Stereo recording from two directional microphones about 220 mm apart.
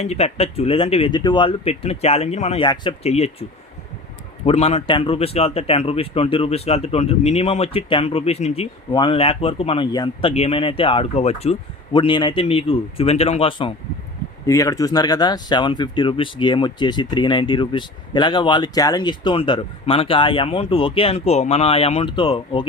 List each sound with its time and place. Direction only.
0.0 s speech: 30° left (ahead or behind)
4.4 s speech: 30° left (ahead or behind)